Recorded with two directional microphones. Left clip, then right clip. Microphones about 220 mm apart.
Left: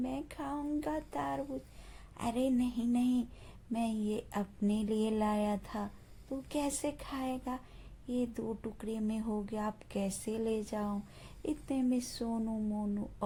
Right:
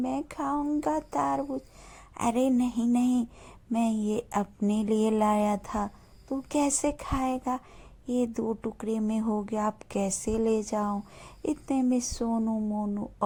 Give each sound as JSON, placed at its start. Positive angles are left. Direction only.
{"t": 0.0, "sound": "speech", "side_deg": -30}